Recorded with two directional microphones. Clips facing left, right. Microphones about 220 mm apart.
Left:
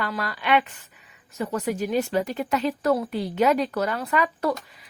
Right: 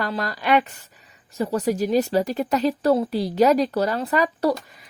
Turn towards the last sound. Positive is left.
turn(degrees=-35)  # may be behind; listen again after turning